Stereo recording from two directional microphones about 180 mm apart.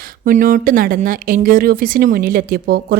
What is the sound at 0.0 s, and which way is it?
A woman's voice, 45° right (ahead or behind).